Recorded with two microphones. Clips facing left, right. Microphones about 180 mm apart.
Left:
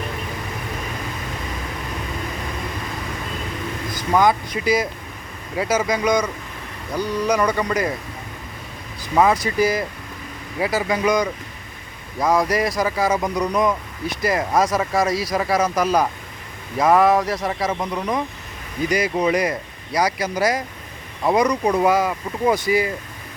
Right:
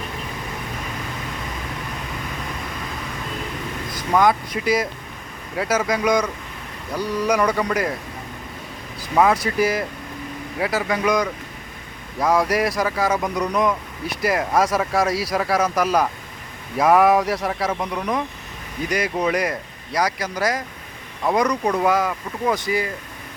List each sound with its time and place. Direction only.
3.9 s speech: centre (ahead or behind)
9.1 s speech: centre (ahead or behind)
12.8 s speech: 5° left (ahead or behind)
21.4 s speech: 15° left (ahead or behind)
21.8 s speech: 5° left (ahead or behind)